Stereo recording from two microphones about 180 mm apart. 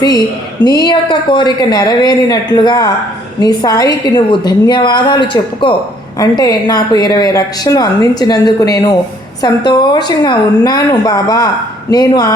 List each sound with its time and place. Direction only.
0.6 s a woman's voice: 25° left (ahead or behind)